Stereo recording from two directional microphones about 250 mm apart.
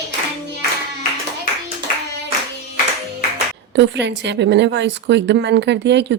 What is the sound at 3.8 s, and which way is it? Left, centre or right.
Speech, right.